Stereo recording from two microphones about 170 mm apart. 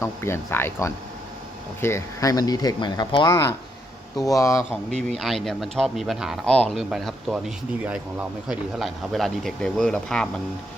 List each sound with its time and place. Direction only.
0.0 s speech: 15° left (ahead or behind)
5.0 s speech: centre (ahead or behind)